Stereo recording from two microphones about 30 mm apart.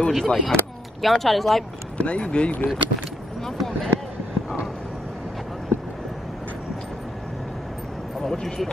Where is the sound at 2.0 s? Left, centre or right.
Left.